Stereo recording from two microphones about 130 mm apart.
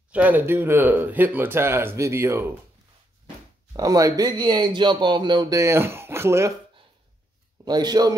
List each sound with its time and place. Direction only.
0.1 s speech: 10° right (ahead or behind)
3.7 s speech: 25° right (ahead or behind)
7.6 s a man's voice: 30° right (ahead or behind)